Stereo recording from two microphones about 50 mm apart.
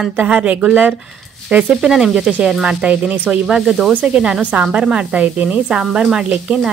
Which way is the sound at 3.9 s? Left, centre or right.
Right.